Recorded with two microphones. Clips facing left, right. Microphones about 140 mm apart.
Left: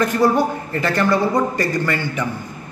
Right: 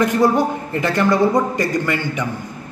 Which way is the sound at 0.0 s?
20° right (ahead or behind).